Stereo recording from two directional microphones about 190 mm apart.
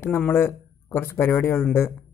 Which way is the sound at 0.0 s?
10° left (ahead or behind).